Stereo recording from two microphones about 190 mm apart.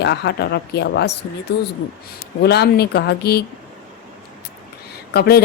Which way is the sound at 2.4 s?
60° left (ahead or behind).